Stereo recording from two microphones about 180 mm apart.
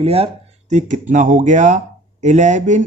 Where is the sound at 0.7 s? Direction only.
45° right (ahead or behind).